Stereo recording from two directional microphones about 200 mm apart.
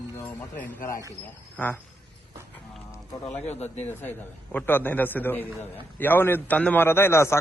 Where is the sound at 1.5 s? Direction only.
10° left (ahead or behind).